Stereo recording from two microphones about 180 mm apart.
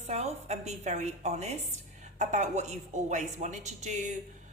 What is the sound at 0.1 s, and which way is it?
A woman's voice, 40° right (ahead or behind).